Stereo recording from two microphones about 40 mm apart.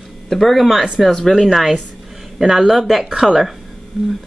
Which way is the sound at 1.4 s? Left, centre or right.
Centre.